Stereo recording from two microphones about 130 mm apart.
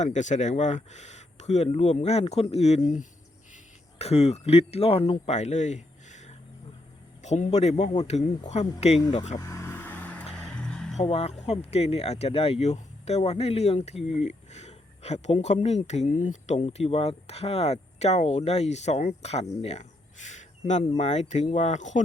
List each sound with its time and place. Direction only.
0.0 s speech: 65° left (ahead or behind)
9.0 s speech: 35° left (ahead or behind)
9.4 s vehicle: 25° left (ahead or behind); by 10.9 s 5° left (ahead or behind)
11.0 s speech: 50° left (ahead or behind); by 22.0 s 70° left (ahead or behind)